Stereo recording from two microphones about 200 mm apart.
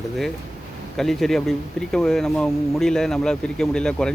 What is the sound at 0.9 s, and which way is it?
Speech, centre (ahead or behind).